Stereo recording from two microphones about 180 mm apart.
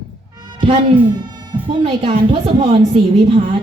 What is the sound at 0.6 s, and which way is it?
A woman's voice, 25° right (ahead or behind).